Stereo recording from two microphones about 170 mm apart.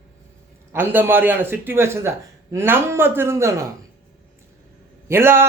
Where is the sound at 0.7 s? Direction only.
10° right (ahead or behind).